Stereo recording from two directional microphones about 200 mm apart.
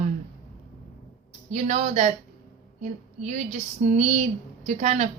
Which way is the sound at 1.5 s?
35° right (ahead or behind).